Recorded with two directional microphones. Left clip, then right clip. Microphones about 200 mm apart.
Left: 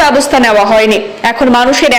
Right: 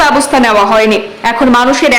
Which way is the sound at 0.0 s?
10° left (ahead or behind).